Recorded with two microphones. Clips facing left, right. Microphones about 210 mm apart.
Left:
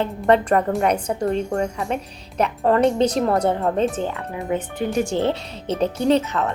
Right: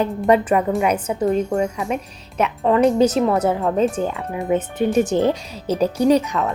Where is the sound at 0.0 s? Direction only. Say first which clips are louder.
Right 1 dB; 10° right (ahead or behind).